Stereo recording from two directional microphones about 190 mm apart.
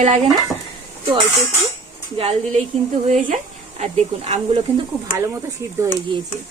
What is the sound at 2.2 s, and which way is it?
Speech, 30° right (ahead or behind).